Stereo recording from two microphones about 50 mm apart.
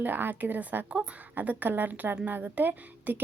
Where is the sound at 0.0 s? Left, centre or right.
Right.